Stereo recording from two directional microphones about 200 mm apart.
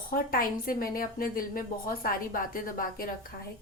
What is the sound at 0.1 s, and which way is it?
A woman's voice, 45° left (ahead or behind).